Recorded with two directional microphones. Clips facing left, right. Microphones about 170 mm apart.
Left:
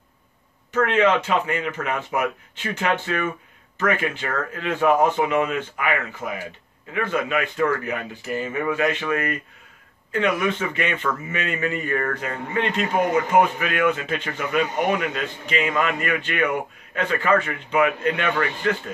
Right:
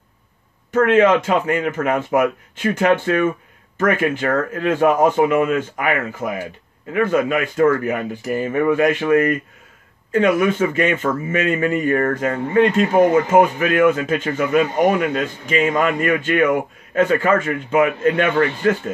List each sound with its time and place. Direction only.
0.7 s speech: 45° right (ahead or behind)
10.1 s speech: 40° right (ahead or behind)